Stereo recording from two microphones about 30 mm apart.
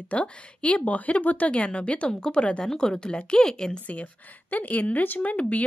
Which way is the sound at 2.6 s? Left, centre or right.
Left.